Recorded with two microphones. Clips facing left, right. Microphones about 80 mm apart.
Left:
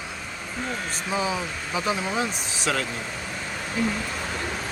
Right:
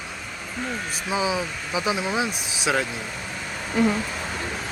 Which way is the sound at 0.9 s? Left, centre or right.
Centre.